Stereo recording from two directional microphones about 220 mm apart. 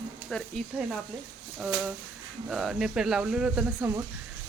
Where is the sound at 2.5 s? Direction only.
Centre (ahead or behind).